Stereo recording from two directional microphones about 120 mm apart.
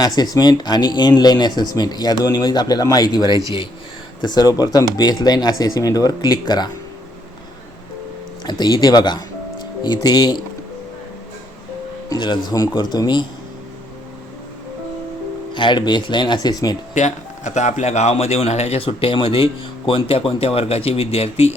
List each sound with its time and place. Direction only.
0.0 s speech: 35° left (ahead or behind)
8.4 s speech: 35° left (ahead or behind)
12.0 s speech: 35° left (ahead or behind)
15.5 s speech: 40° left (ahead or behind)
16.9 s a man's voice: 80° left; by 21.5 s 55° left (ahead or behind)